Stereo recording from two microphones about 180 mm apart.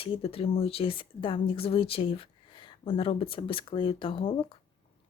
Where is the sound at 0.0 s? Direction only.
30° left (ahead or behind).